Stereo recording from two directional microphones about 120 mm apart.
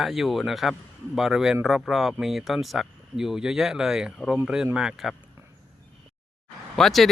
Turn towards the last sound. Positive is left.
turn(degrees=0)  # may be behind; listen again after turning